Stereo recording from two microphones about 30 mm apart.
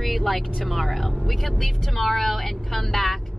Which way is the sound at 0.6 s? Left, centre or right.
Centre.